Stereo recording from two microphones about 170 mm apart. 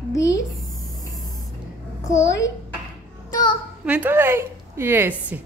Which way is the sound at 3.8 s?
10° right (ahead or behind).